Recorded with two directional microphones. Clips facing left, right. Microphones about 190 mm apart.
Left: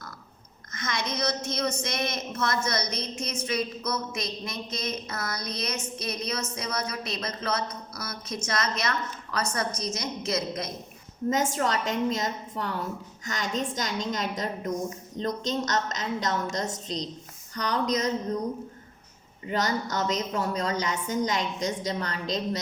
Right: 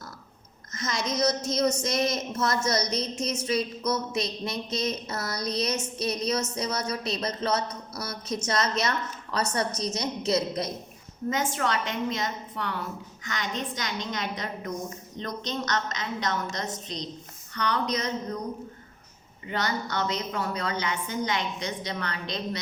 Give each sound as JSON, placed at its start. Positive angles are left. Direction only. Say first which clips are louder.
{"t": 0.7, "sound": "a woman's voice", "louder": "right 2 dB", "side_deg": -40}
{"t": 11.3, "sound": "a woman's voice", "louder": "left 2 dB", "side_deg": 40}
{"t": 19.5, "sound": "a woman's voice", "louder": "left 2 dB", "side_deg": 40}